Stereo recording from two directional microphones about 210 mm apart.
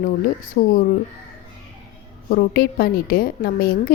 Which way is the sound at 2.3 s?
50° left (ahead or behind).